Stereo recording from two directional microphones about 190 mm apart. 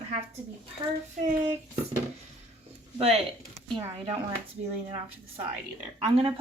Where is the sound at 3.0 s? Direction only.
35° right (ahead or behind).